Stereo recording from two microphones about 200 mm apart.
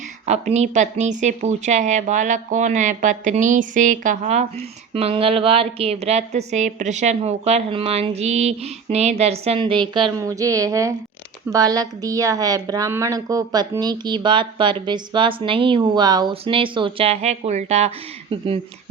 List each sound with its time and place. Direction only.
0.3 s a woman's voice: 35° right (ahead or behind)